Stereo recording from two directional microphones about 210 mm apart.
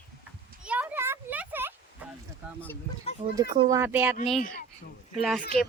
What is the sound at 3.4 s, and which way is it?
Speech, 15° right (ahead or behind).